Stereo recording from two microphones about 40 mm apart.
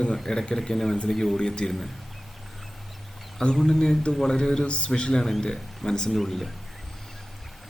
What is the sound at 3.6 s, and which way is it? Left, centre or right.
Speech, centre.